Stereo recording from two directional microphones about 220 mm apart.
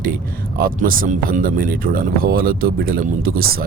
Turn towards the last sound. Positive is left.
turn(degrees=-45)  # may be behind; listen again after turning